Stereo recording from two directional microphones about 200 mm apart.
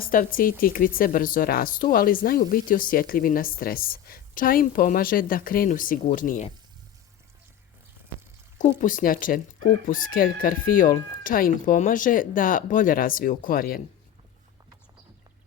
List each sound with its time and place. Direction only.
0.0 s speech: 45° left (ahead or behind)
8.8 s speech: 40° left (ahead or behind)